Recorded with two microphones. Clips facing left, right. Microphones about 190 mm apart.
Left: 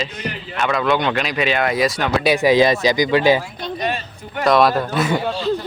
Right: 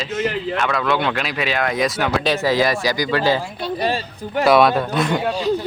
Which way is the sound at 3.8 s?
35° right (ahead or behind).